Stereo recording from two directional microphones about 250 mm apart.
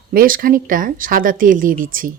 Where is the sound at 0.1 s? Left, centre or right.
Right.